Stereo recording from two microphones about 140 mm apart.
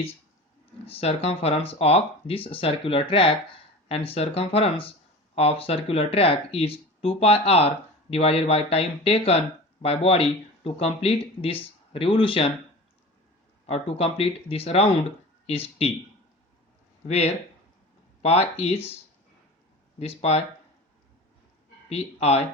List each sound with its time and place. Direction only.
0.9 s speech: 45° left (ahead or behind)
13.7 s speech: 45° left (ahead or behind)
17.1 s speech: 50° left (ahead or behind)
20.0 s speech: 50° left (ahead or behind)
21.8 s speech: 50° left (ahead or behind)